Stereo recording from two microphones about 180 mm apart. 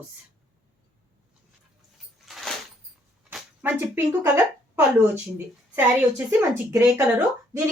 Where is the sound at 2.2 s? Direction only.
Centre (ahead or behind).